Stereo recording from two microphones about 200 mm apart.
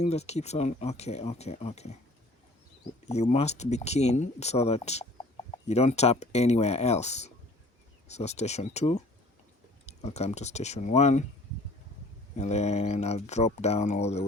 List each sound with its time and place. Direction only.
0.0 s speech: 30° left (ahead or behind)
3.1 s speech: 35° left (ahead or behind)
12.4 s speech: 35° left (ahead or behind)